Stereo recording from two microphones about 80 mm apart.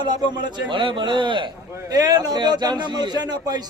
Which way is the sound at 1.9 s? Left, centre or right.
Right.